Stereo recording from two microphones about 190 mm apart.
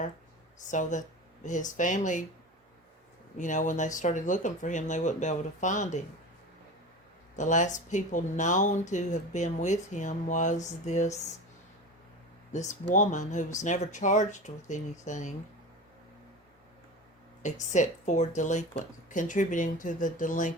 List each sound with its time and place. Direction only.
0.6 s speech: 40° left (ahead or behind)
3.3 s speech: 40° left (ahead or behind)
7.3 s speech: 40° left (ahead or behind)
12.5 s speech: 40° left (ahead or behind)
17.4 s speech: 40° left (ahead or behind)